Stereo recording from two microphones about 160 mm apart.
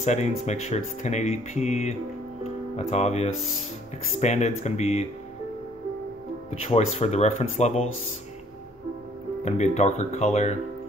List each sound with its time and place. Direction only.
0.0 s speech: 45° left (ahead or behind)
2.4 s music: 45° left (ahead or behind)
4.1 s speech: 45° left (ahead or behind)
6.6 s speech: 40° left (ahead or behind)
9.4 s speech: 45° left (ahead or behind)